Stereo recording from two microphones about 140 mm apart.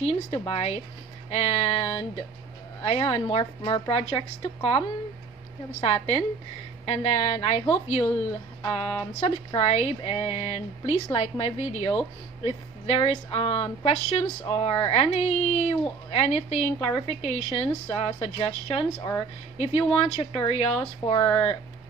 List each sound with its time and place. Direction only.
0.0 s a woman's voice: 45° left (ahead or behind)
6.9 s a woman's voice: 45° left (ahead or behind)